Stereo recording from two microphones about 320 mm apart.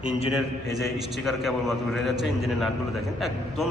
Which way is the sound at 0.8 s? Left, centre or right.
Centre.